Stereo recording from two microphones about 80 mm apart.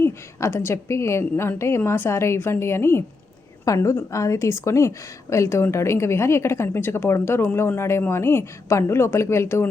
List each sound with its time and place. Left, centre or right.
0.0 s a woman's voice: left